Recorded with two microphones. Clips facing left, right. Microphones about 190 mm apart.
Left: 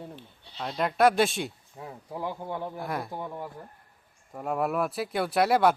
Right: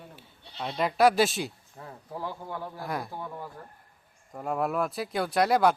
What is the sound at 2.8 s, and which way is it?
Speech, centre (ahead or behind).